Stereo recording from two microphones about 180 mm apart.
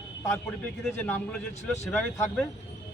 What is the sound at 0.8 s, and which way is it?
Speech, 5° left (ahead or behind).